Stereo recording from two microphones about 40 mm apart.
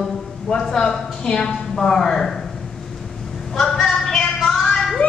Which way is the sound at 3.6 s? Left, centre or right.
Centre.